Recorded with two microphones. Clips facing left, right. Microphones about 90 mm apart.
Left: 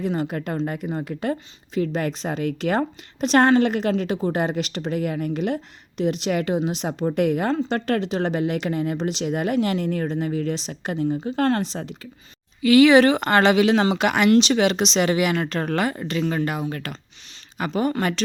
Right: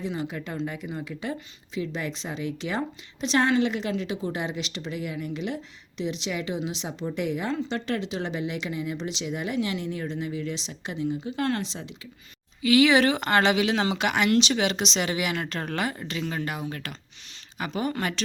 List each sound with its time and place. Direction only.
0.0 s a woman's voice: 50° left (ahead or behind)
14.3 s a woman's voice: 40° left (ahead or behind)